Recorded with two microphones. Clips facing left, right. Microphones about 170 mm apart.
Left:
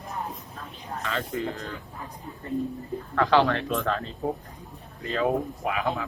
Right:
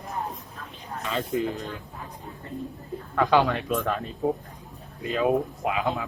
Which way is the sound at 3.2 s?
15° right (ahead or behind).